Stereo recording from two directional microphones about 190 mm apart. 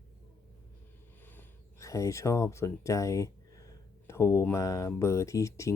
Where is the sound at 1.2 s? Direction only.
10° left (ahead or behind).